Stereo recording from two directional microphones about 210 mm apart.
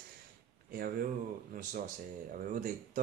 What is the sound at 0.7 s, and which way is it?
Speech, 45° right (ahead or behind).